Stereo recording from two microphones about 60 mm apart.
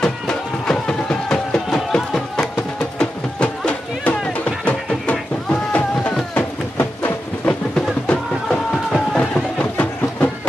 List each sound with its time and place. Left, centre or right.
0.0 s music: centre
5.5 s a sound: left
9.3 s music: left